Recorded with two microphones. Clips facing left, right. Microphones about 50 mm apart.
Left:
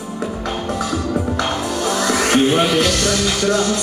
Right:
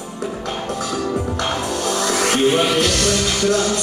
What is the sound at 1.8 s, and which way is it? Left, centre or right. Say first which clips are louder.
Music: left 2 dB; centre.